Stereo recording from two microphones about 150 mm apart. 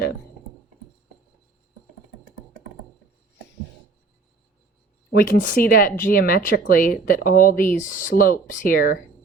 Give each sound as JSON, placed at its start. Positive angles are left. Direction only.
{"t": 5.1, "sound": "speech", "side_deg": 75}